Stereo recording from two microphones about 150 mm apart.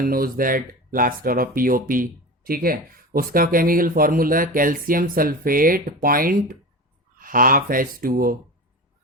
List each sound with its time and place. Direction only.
0.0 s speech: 75° right (ahead or behind)